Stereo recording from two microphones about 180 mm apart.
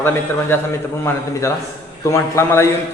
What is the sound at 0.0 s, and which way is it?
A man's voice, 10° left (ahead or behind).